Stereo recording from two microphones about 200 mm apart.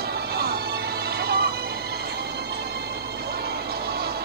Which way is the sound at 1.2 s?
55° right (ahead or behind).